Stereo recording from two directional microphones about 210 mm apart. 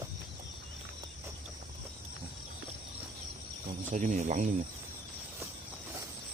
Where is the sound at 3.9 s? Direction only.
35° right (ahead or behind).